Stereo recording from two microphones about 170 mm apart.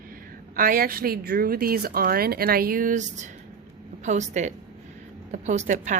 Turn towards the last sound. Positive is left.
turn(degrees=-45)  # may be behind; listen again after turning